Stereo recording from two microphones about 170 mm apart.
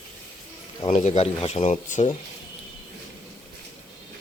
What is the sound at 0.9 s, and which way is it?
Speech, 40° left (ahead or behind).